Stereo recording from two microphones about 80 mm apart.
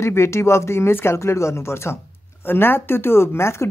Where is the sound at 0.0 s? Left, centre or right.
Left.